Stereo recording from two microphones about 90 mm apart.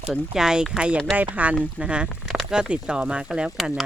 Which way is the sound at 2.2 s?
Centre (ahead or behind).